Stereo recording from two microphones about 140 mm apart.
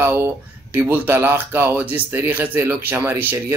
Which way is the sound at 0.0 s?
15° right (ahead or behind).